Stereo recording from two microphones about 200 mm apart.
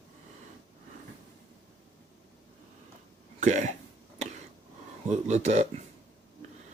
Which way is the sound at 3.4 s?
35° right (ahead or behind).